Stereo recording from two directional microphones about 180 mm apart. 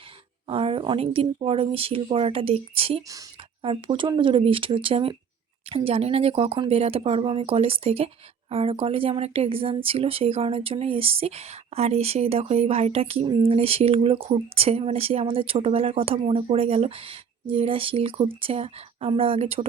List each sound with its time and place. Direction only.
0.4 s speech: 30° right (ahead or behind)